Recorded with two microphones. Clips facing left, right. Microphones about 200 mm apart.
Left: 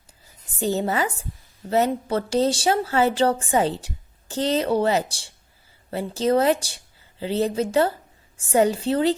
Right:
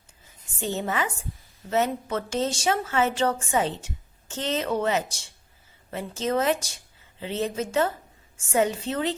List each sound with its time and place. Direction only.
0.5 s speech: 35° left (ahead or behind)